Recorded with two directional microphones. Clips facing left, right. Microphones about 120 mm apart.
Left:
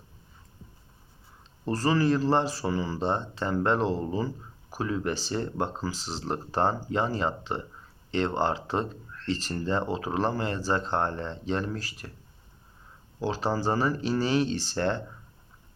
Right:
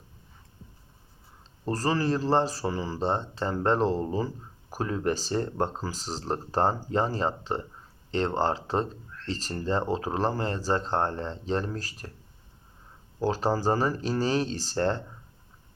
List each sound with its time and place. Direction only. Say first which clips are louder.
1.6 s speech: left 2 dB; 35° right (ahead or behind)
13.2 s speech: right 2 dB; 40° right (ahead or behind)